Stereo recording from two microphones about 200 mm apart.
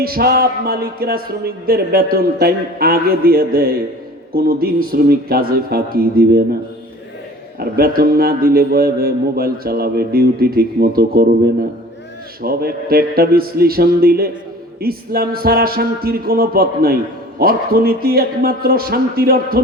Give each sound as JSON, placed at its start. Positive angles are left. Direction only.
{"t": 0.0, "sound": "music", "side_deg": -50}
{"t": 7.6, "sound": "music", "side_deg": -45}
{"t": 12.4, "sound": "music", "side_deg": -50}